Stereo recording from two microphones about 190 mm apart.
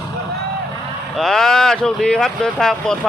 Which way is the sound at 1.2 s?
Centre (ahead or behind).